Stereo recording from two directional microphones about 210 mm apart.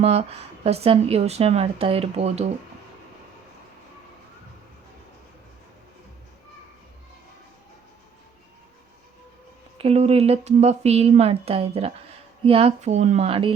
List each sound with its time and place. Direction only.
0.0 s speech: 30° right (ahead or behind)
9.7 s speech: 30° right (ahead or behind)